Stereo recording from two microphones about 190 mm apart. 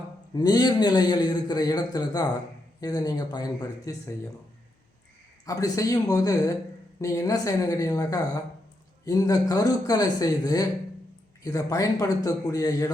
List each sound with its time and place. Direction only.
0.3 s a man's voice: 20° left (ahead or behind)
5.5 s a man's voice: 20° left (ahead or behind)